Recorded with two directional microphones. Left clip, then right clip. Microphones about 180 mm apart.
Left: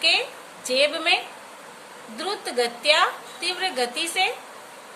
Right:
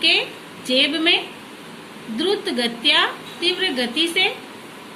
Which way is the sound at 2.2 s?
65° left (ahead or behind).